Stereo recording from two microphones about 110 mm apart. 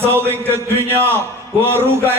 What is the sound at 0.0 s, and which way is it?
A man's voice, 20° right (ahead or behind).